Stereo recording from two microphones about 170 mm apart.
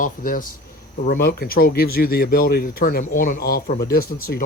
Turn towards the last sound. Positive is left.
turn(degrees=60)  # may be behind; listen again after turning